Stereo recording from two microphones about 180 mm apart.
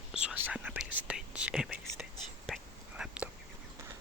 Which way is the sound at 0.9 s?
5° right (ahead or behind).